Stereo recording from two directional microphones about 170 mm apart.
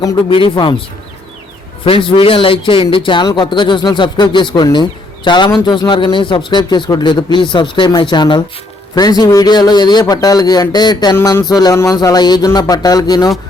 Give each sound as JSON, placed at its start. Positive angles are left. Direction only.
{"t": 0.0, "sound": "a man's voice", "side_deg": 25}
{"t": 1.8, "sound": "a man's voice", "side_deg": 30}